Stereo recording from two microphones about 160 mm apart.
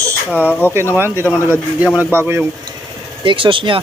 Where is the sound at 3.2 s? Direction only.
30° right (ahead or behind).